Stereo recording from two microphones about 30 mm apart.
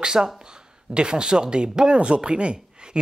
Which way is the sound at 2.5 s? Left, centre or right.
Right.